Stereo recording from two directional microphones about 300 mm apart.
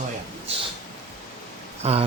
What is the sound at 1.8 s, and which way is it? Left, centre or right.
Speech, right.